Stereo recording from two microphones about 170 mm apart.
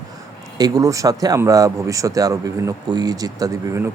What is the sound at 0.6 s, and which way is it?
Speech, 20° right (ahead or behind).